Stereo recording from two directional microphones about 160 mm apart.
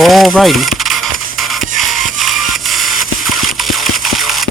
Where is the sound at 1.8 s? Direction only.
Centre (ahead or behind).